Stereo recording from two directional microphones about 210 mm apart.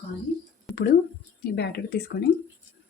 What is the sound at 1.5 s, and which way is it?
Speech, 50° left (ahead or behind).